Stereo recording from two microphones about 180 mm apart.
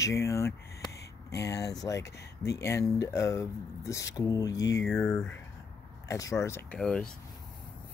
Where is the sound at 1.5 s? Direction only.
20° left (ahead or behind).